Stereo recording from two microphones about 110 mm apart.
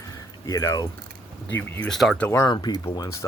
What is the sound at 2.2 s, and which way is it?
Speech, 20° left (ahead or behind).